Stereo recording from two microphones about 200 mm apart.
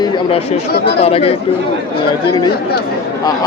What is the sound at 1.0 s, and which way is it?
Speech, 30° left (ahead or behind).